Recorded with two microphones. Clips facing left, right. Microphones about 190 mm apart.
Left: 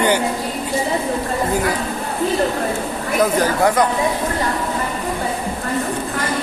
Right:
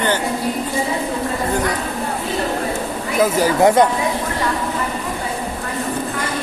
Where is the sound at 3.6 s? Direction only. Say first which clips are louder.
Right 5 dB; 25° right (ahead or behind).